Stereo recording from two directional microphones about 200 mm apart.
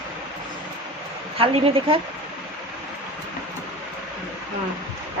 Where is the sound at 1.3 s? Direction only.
25° right (ahead or behind).